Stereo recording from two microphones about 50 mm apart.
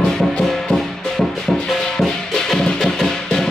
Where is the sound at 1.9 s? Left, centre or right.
Centre.